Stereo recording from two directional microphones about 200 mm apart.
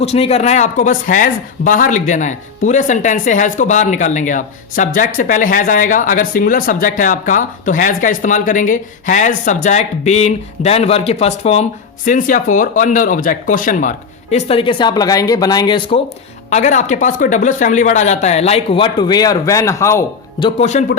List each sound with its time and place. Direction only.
0.0 s speech: 30° left (ahead or behind)
16.5 s speech: 35° left (ahead or behind); by 20.5 s 15° left (ahead or behind)
20.6 s speech: 35° left (ahead or behind)